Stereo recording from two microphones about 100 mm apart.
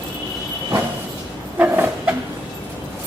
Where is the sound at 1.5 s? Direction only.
20° right (ahead or behind).